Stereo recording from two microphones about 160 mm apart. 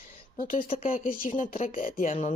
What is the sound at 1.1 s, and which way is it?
Speech, 60° left (ahead or behind).